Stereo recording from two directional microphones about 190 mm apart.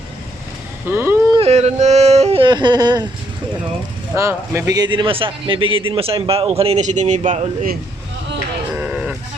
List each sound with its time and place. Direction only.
0.9 s a sound: 10° right (ahead or behind)
1.4 s speech: 35° right (ahead or behind)
4.1 s a man's voice: 15° right (ahead or behind); by 7.8 s 45° right (ahead or behind)
8.7 s sheep: 5° right (ahead or behind)